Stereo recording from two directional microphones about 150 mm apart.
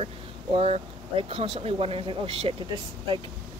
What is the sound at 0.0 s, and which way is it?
Speech, 40° right (ahead or behind).